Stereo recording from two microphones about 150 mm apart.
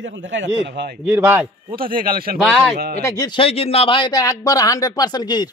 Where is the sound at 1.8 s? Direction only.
70° right (ahead or behind).